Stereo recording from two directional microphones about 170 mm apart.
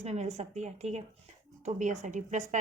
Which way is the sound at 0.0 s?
40° right (ahead or behind).